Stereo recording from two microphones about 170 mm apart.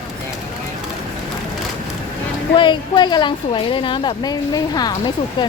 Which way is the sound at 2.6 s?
25° left (ahead or behind).